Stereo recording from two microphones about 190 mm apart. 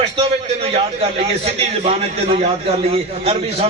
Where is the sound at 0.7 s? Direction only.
30° right (ahead or behind).